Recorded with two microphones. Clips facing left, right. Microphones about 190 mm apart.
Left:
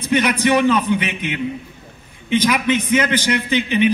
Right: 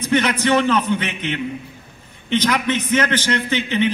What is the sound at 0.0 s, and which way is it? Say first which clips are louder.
A man's voice: left 1 dB; 10° left (ahead or behind).